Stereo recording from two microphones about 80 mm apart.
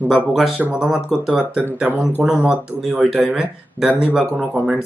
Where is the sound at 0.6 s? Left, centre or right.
Centre.